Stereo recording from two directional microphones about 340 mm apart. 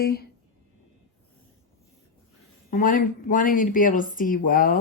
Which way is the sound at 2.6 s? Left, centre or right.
Left.